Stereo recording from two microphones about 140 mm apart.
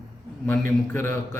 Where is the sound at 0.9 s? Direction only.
15° left (ahead or behind).